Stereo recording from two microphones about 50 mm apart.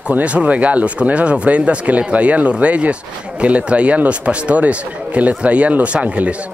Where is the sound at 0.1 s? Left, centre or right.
Right.